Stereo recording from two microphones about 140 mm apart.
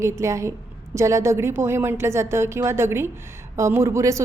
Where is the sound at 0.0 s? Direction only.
20° right (ahead or behind).